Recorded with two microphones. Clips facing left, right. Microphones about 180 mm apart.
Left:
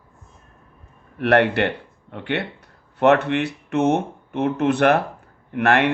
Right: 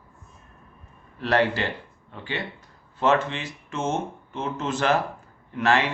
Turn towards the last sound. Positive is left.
turn(degrees=60)  # may be behind; listen again after turning